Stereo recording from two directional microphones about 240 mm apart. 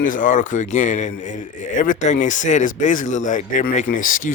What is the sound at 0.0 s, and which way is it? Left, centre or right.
Speech, left.